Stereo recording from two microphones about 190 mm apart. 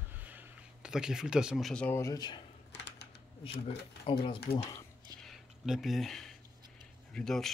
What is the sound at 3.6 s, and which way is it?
Speech, 30° left (ahead or behind).